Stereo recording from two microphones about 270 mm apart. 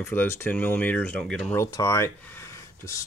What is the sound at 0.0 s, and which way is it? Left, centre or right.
Speech, centre.